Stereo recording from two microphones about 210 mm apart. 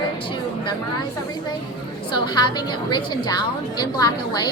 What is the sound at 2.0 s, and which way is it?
A woman's voice, 20° left (ahead or behind).